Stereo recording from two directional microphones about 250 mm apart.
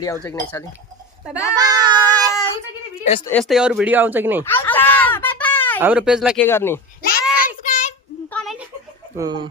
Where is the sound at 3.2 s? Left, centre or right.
Centre.